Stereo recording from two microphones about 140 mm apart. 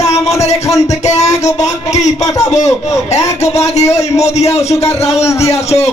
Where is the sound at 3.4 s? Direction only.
50° left (ahead or behind).